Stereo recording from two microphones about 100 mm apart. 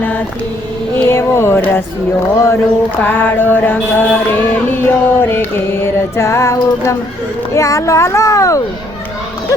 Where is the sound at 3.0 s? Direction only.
20° left (ahead or behind).